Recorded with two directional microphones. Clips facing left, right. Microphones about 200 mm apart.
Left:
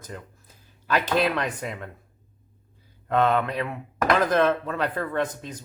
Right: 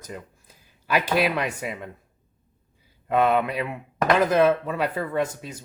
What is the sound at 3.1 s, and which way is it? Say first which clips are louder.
Speech: right 1 dB; 10° right (ahead or behind).